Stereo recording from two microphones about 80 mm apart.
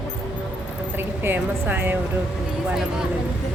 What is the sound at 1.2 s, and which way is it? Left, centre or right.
Speech, right.